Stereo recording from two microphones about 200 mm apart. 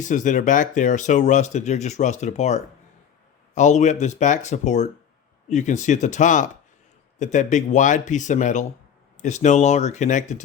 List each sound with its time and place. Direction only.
0.0 s speech: 40° left (ahead or behind)